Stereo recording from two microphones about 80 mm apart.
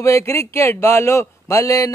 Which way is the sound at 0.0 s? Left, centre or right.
Left.